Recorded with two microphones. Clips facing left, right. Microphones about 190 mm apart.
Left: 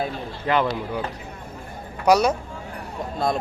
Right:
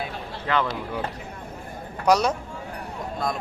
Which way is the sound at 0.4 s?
20° left (ahead or behind).